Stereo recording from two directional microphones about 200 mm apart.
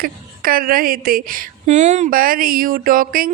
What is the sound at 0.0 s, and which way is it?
A woman's voice, 45° right (ahead or behind).